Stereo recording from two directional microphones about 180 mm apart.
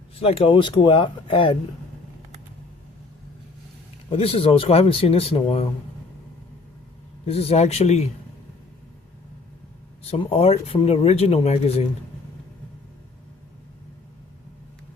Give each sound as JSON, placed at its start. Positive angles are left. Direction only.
{"t": 0.2, "sound": "speech", "side_deg": 30}
{"t": 4.1, "sound": "speech", "side_deg": 30}
{"t": 7.3, "sound": "speech", "side_deg": 35}
{"t": 10.0, "sound": "speech", "side_deg": 35}